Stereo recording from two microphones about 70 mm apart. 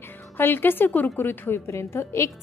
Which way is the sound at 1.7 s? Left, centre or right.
Left.